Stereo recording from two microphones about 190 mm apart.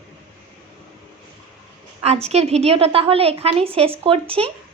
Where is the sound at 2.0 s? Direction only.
35° right (ahead or behind).